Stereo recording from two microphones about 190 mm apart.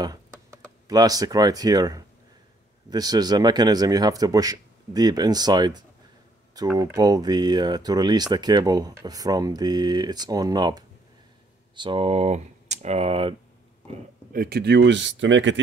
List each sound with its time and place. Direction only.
0.8 s speech: 20° right (ahead or behind)
14.3 s speech: 55° right (ahead or behind); by 15.6 s 75° right (ahead or behind)